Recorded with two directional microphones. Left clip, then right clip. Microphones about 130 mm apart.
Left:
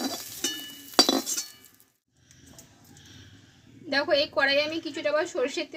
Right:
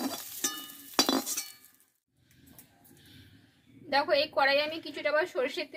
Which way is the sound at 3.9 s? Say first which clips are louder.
Left 2 dB; 35° left (ahead or behind).